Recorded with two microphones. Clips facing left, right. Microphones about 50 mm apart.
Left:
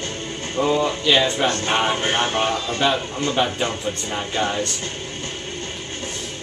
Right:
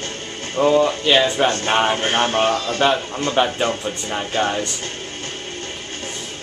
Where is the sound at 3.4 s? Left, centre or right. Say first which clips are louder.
Right 4 dB; centre.